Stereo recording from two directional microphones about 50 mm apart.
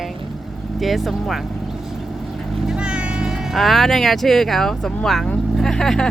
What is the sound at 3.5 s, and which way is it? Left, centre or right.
Speech, centre.